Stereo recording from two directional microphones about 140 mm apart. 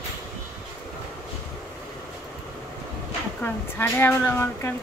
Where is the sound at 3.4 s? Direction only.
15° left (ahead or behind).